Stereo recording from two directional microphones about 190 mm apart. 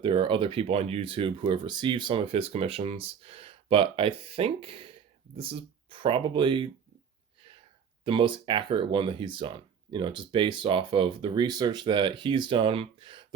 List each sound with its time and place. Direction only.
0.0 s speech: 25° right (ahead or behind)
8.0 s speech: 25° right (ahead or behind)